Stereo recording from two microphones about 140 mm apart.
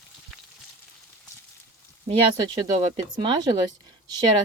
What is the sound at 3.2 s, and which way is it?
Speech, 35° right (ahead or behind).